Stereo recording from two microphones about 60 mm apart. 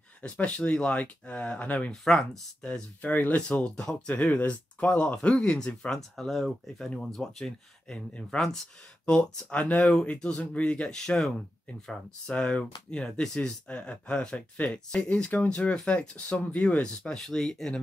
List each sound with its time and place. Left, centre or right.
0.2 s speech: centre
7.9 s speech: centre
8.4 s speech: centre
9.0 s speech: left
10.1 s speech: centre
13.7 s speech: centre